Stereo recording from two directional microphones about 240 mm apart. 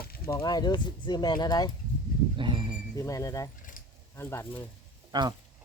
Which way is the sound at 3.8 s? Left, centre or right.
Left.